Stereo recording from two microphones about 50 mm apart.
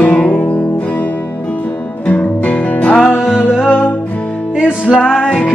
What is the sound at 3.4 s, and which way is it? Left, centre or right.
Music, centre.